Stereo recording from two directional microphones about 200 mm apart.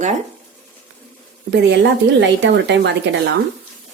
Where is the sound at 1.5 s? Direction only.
60° right (ahead or behind).